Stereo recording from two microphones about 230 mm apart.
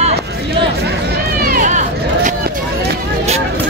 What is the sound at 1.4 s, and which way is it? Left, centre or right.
Run, right.